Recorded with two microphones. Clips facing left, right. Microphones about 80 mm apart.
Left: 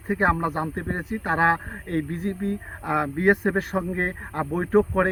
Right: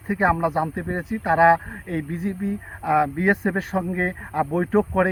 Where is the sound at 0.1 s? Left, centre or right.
Centre.